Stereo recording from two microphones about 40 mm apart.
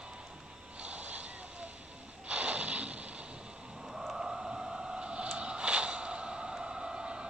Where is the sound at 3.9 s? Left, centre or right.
Centre.